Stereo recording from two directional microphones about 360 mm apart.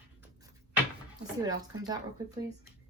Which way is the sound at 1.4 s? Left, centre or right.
Centre.